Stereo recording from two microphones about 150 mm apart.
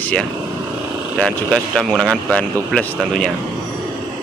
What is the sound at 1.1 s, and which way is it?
A man's voice, centre (ahead or behind).